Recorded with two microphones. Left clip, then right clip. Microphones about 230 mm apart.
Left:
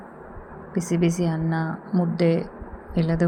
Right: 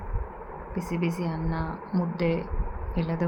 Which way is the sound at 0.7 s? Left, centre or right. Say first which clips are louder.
Left 7 dB; centre.